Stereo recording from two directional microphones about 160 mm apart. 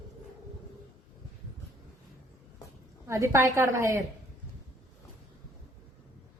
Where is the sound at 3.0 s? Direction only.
20° right (ahead or behind).